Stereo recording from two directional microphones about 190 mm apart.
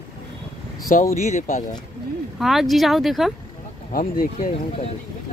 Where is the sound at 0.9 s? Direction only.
40° left (ahead or behind).